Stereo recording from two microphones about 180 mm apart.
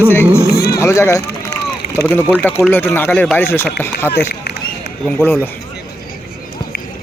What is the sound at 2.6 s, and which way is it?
Speech, 10° left (ahead or behind).